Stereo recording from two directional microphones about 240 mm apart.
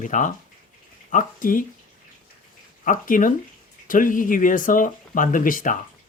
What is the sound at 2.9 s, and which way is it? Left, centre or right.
Speech, left.